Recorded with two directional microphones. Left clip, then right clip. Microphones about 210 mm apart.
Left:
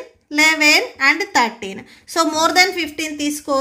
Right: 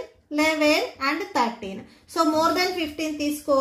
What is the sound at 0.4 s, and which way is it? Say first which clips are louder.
A woman's voice: left 7 dB; 50° left (ahead or behind).